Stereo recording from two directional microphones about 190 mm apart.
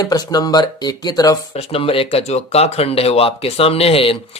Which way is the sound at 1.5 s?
30° left (ahead or behind).